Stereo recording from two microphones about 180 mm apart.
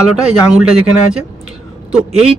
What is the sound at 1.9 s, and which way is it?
Speech, 5° right (ahead or behind).